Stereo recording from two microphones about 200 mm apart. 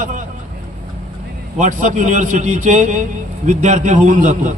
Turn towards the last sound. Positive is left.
turn(degrees=-40)  # may be behind; listen again after turning